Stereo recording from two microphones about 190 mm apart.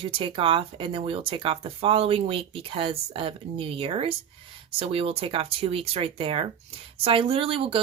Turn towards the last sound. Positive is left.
turn(degrees=-30)  # may be behind; listen again after turning